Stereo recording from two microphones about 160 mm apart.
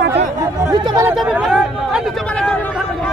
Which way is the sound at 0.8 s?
20° right (ahead or behind).